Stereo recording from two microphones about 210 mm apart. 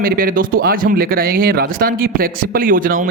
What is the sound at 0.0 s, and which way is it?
Speech, 45° right (ahead or behind).